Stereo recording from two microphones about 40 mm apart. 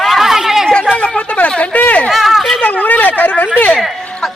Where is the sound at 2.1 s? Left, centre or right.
Centre.